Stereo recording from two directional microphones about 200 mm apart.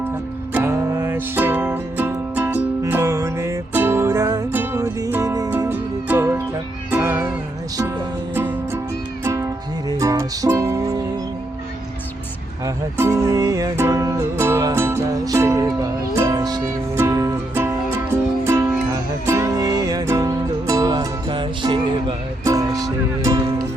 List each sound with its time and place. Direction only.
0.5 s music: 10° right (ahead or behind)
8.4 s music: 10° right (ahead or behind)
12.6 s music: 15° right (ahead or behind)
19.2 s music: 15° right (ahead or behind)